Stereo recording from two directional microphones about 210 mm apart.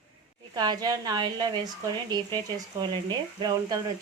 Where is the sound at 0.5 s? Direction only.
20° right (ahead or behind).